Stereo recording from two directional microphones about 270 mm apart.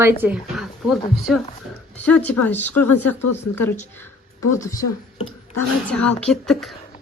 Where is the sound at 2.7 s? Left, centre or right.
Left.